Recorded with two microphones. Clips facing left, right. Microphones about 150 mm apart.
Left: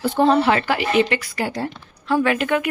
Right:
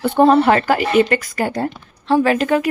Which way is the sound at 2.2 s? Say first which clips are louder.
Right 4 dB; 35° right (ahead or behind).